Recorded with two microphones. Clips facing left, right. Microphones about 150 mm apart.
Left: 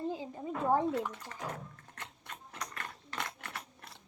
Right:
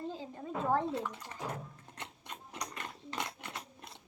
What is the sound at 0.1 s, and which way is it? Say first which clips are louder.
Speech: left 2 dB; 15° left (ahead or behind).